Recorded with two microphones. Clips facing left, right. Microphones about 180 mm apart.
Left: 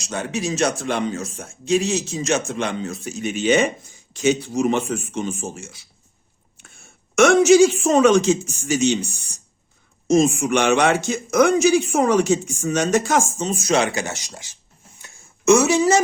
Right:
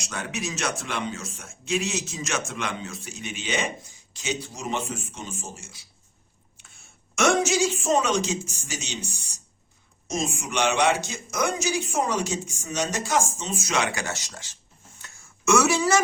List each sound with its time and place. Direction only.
0.1 s speech: 30° left (ahead or behind); by 5.6 s 65° left (ahead or behind)
7.2 s speech: 60° left (ahead or behind)
10.1 s speech: 60° left (ahead or behind); by 14.5 s 15° left (ahead or behind)
15.0 s a sound: 20° left (ahead or behind)